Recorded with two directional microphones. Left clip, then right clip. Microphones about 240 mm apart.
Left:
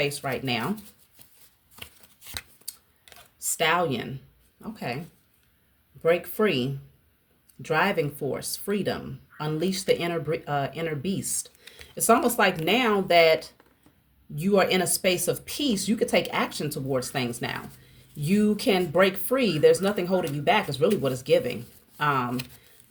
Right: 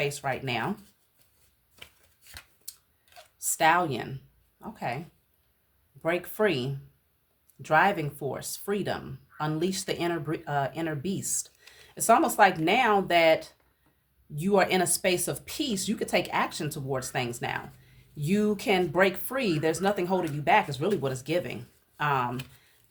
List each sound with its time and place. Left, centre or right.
0.0 s speech: centre
1.7 s chopping: left
3.6 s speech: centre
6.0 s speech: centre